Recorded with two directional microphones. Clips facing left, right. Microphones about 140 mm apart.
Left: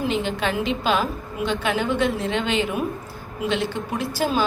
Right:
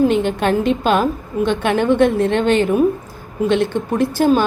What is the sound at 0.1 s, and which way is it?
A woman's voice, 50° right (ahead or behind).